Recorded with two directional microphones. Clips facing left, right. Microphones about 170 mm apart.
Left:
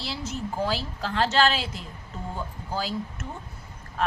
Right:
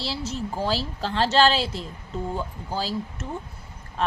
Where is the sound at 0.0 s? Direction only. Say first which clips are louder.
Right 3 dB; 30° right (ahead or behind).